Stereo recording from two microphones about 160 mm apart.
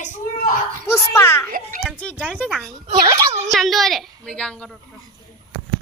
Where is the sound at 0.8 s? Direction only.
15° left (ahead or behind).